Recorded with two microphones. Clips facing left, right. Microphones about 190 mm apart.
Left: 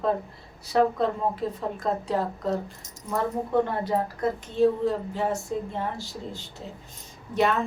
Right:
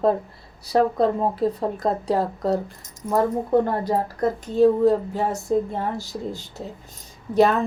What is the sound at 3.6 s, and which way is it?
A woman's voice, 40° right (ahead or behind).